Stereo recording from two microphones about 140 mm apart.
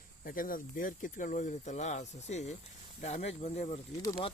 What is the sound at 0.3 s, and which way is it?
Speech, 90° left.